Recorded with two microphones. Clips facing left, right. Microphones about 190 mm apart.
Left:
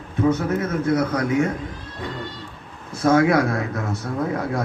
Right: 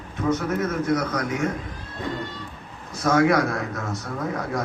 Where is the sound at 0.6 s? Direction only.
30° left (ahead or behind).